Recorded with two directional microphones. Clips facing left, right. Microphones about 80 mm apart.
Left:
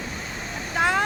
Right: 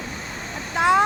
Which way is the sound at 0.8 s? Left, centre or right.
Centre.